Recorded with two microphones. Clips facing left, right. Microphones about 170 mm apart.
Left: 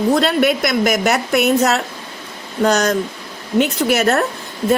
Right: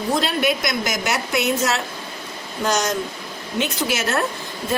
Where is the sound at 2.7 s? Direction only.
60° left (ahead or behind).